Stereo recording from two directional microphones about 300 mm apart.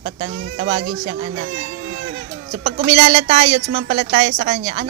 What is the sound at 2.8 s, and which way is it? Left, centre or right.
A woman's voice, centre.